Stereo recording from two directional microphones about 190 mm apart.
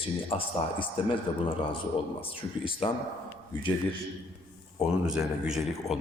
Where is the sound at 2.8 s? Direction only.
30° left (ahead or behind).